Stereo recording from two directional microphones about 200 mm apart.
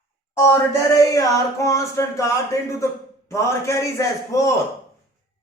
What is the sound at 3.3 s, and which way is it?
Speech, 15° left (ahead or behind).